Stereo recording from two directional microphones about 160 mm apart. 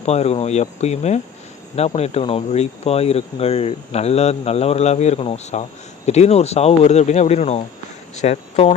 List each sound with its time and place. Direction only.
0.0 s speech: 40° left (ahead or behind)